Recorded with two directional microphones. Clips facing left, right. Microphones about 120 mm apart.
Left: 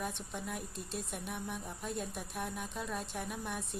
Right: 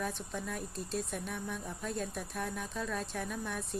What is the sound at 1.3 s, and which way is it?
A woman's voice, 20° left (ahead or behind).